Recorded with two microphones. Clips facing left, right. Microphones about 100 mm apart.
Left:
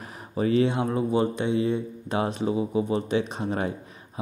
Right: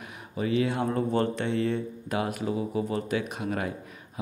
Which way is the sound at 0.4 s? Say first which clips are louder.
Left 4 dB; 35° left (ahead or behind).